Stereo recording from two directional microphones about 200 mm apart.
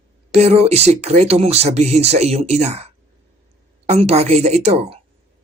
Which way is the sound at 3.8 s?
35° right (ahead or behind).